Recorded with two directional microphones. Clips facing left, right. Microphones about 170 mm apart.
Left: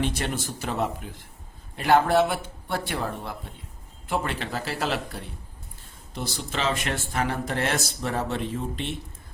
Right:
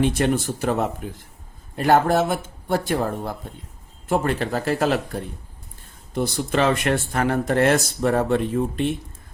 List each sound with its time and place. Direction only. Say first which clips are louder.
0.2 s speech: right 9 dB; 50° right (ahead or behind)